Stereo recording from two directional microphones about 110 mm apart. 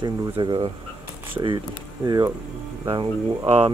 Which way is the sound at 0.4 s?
50° right (ahead or behind).